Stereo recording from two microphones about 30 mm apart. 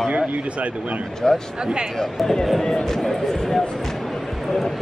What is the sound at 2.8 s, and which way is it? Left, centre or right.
Speech, centre.